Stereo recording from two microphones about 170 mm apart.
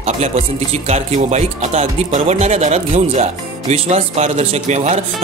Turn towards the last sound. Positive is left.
turn(degrees=-40)  # may be behind; listen again after turning